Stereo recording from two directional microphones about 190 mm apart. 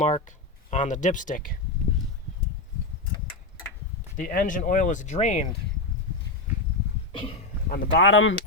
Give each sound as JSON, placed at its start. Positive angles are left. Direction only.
{"t": 0.0, "sound": "speech", "side_deg": 40}
{"t": 4.2, "sound": "speech", "side_deg": 45}
{"t": 7.7, "sound": "speech", "side_deg": 75}